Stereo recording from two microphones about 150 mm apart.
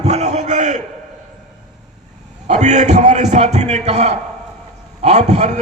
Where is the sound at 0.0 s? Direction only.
50° right (ahead or behind).